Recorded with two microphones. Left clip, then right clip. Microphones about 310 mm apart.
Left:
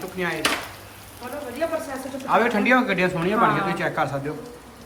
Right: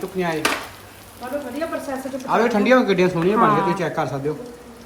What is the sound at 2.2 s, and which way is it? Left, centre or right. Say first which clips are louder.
A man's voice: right 1 dB; centre.